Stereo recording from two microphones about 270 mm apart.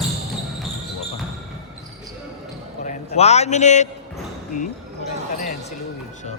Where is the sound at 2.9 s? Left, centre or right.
Left.